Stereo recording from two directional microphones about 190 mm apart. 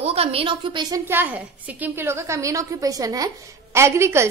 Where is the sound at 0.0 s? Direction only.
30° right (ahead or behind).